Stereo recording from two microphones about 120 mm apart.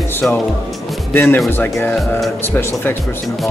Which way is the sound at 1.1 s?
20° left (ahead or behind).